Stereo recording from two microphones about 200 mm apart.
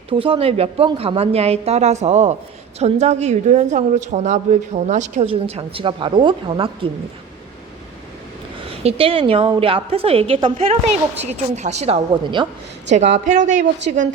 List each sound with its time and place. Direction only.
0.1 s a woman's voice: 25° right (ahead or behind)
8.6 s a woman's voice: 30° right (ahead or behind)
12.9 s a woman's voice: 35° right (ahead or behind)